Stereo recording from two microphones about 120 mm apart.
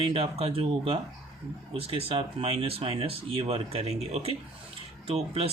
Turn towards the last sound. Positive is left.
turn(degrees=-55)  # may be behind; listen again after turning